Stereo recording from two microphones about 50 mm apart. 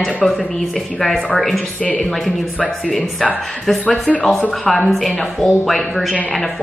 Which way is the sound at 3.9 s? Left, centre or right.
Left.